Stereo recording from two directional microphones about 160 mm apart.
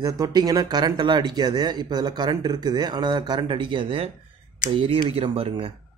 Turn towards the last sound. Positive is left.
turn(degrees=-35)  # may be behind; listen again after turning